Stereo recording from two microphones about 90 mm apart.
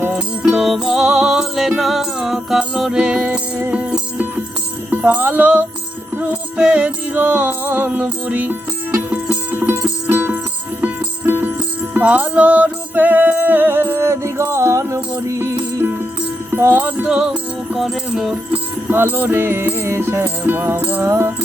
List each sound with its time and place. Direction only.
0.1 s music: 5° right (ahead or behind); by 17.1 s 20° right (ahead or behind)
17.7 s speech: 5° right (ahead or behind)
18.9 s music: 25° right (ahead or behind)